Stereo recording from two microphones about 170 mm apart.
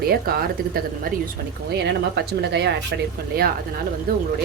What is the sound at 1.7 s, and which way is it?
Speech, 75° right (ahead or behind).